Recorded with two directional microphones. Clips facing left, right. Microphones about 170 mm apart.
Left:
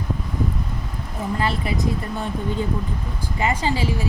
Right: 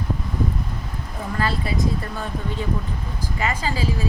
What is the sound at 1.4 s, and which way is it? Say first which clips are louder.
Speech: right 1 dB; 20° left (ahead or behind).